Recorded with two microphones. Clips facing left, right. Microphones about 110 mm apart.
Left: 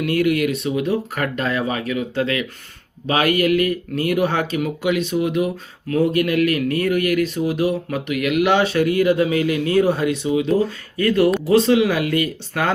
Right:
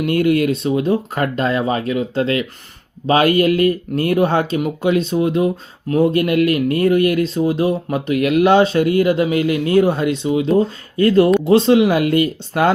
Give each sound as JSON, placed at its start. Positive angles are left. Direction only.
{"t": 0.0, "sound": "speech", "side_deg": -30}